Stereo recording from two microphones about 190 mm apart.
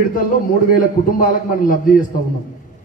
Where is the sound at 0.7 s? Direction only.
45° left (ahead or behind).